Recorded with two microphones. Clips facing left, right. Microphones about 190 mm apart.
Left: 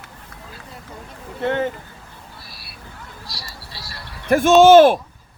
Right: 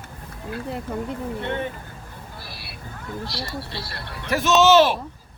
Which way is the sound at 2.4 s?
60° right (ahead or behind).